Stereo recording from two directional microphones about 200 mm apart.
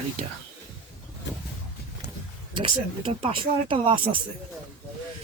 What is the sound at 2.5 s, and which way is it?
Speech, 25° right (ahead or behind).